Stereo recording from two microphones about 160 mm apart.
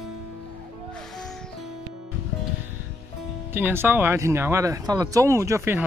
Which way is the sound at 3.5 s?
15° right (ahead or behind).